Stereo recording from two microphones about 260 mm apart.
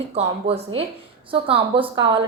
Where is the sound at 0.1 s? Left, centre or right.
Right.